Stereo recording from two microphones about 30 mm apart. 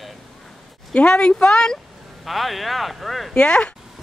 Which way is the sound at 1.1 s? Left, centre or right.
Left.